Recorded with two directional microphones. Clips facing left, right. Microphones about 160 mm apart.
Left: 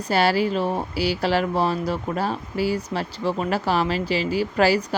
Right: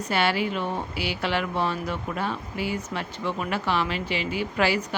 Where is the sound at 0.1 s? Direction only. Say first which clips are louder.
Left 5 dB; 35° left (ahead or behind).